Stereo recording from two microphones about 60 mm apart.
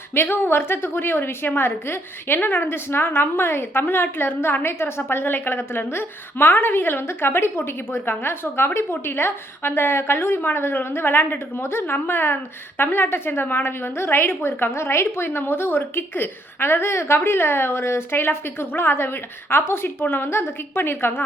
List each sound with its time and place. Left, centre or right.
0.1 s a woman's voice: left